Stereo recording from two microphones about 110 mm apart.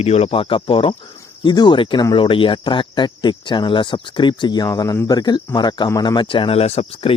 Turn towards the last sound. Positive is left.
turn(degrees=60)  # may be behind; listen again after turning